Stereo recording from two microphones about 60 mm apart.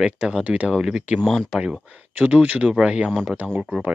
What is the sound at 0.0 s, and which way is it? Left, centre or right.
Speech, centre.